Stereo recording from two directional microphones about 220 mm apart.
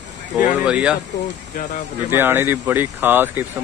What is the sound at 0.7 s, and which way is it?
Speech, 5° right (ahead or behind).